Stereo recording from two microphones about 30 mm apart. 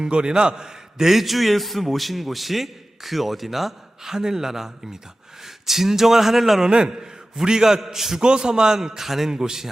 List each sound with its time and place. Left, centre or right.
0.1 s a man's voice: right
0.9 s a man's voice: centre
6.7 s a man's voice: right
7.4 s a man's voice: centre
8.2 s a man's voice: right